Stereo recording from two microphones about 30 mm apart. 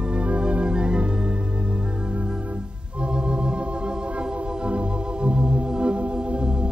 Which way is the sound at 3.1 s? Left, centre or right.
Right.